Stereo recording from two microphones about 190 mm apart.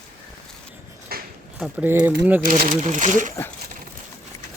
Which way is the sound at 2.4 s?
45° right (ahead or behind).